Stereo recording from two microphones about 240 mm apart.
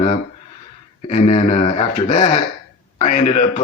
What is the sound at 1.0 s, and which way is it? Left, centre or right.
Speech, left.